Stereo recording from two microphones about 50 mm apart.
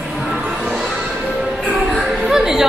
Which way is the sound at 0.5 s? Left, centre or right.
Right.